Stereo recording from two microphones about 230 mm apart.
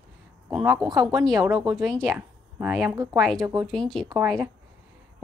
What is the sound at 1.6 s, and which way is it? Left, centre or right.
Speech, centre.